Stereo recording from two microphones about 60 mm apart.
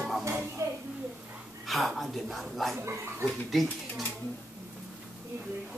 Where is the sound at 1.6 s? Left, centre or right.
Centre.